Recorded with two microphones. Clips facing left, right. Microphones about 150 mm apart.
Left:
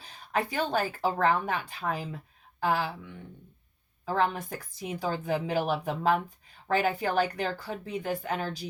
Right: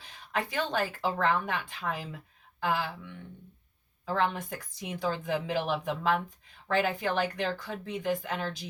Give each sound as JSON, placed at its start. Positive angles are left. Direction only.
{"t": 0.0, "sound": "speech", "side_deg": 40}